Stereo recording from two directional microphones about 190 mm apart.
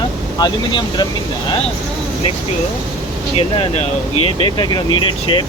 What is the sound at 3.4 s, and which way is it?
Speech, 30° left (ahead or behind).